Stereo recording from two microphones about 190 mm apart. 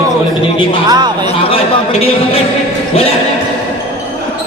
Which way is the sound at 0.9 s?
20° right (ahead or behind).